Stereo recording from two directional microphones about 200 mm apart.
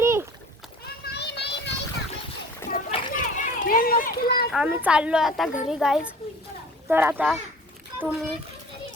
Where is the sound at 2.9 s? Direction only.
30° left (ahead or behind).